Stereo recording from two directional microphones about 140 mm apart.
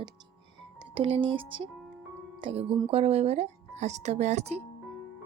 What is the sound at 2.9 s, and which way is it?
Speech, 45° right (ahead or behind).